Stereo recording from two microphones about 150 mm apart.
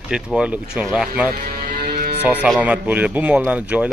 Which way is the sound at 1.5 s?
90° right.